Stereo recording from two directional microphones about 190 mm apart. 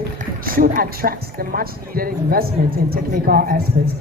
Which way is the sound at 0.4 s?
50° right (ahead or behind).